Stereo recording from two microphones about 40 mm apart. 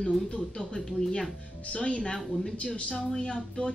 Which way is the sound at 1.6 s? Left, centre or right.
Left.